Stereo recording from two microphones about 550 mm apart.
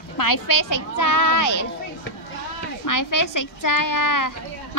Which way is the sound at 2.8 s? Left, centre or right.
Left.